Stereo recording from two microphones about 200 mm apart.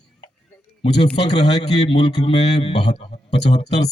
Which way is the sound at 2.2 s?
20° left (ahead or behind).